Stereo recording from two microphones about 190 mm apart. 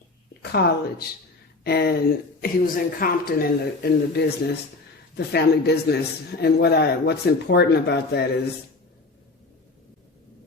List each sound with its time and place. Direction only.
0.5 s speech: 55° left (ahead or behind)